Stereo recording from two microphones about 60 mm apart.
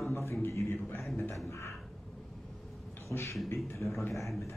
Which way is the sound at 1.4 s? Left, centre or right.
Left.